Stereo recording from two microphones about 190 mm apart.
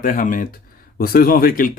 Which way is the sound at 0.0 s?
45° left (ahead or behind).